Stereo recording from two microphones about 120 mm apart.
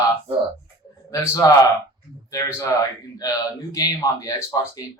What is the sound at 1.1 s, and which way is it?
Speech, 25° left (ahead or behind).